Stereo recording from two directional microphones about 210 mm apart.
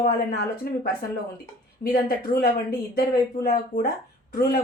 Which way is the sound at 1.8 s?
45° left (ahead or behind).